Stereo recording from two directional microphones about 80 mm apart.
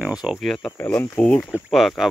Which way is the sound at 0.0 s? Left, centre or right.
Centre.